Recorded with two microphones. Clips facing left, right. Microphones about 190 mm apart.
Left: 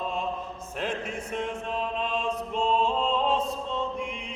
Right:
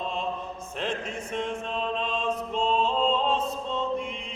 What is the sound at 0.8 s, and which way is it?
Chant, 10° left (ahead or behind).